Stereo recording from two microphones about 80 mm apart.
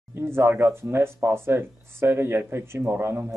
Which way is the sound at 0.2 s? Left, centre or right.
Right.